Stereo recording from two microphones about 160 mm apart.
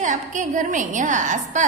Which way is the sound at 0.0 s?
50° right (ahead or behind).